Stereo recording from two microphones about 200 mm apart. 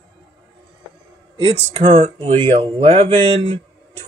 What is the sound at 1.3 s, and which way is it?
Speech, 25° right (ahead or behind).